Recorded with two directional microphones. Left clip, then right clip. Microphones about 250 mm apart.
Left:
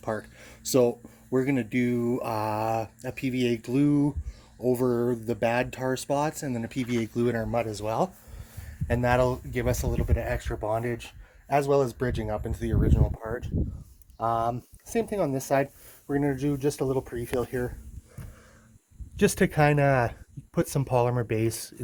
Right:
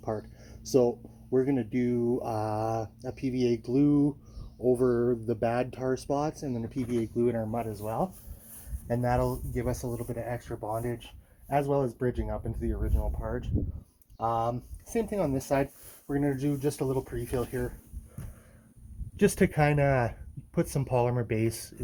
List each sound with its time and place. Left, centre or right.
0.0 s a sound: left
0.7 s speech: left
8.9 s speech: left
19.1 s speech: left